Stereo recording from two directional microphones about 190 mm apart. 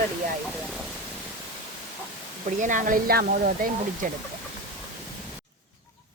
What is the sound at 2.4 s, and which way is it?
Speech, 40° right (ahead or behind).